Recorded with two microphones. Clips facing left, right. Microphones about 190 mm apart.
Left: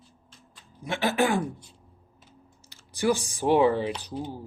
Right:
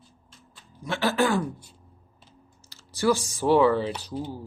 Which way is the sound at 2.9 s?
15° left (ahead or behind).